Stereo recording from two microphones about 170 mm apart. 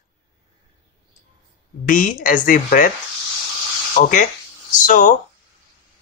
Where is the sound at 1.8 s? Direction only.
50° left (ahead or behind).